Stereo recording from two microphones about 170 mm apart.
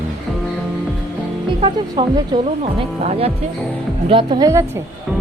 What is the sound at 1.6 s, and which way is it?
Speech, 30° right (ahead or behind).